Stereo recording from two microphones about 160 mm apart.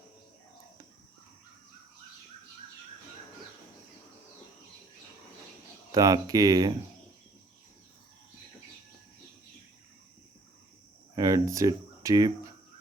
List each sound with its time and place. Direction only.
5.9 s speech: 20° right (ahead or behind)
11.1 s speech: 20° right (ahead or behind)